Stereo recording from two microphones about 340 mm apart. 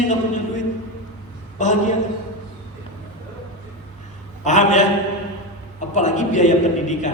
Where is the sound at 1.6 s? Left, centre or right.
Left.